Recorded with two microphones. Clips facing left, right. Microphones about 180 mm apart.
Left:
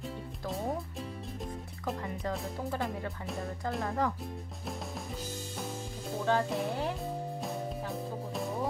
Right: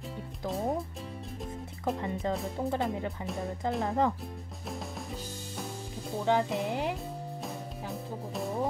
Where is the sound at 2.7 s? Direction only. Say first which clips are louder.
Right 4 dB; 20° right (ahead or behind).